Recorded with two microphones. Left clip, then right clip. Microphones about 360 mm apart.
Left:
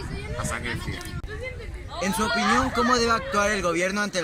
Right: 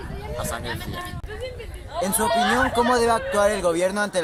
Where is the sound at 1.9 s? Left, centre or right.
Right.